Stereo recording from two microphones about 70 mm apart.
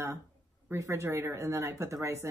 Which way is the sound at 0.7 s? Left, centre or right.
Right.